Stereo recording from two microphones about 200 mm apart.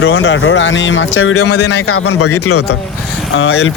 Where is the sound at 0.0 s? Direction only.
80° left.